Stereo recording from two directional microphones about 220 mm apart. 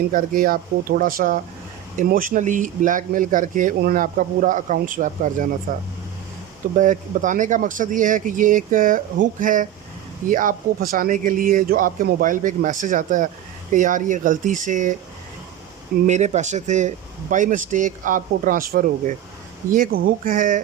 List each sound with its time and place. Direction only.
0.1 s speech: 40° right (ahead or behind)
6.7 s speech: 35° right (ahead or behind)
16.0 s speech: 30° right (ahead or behind)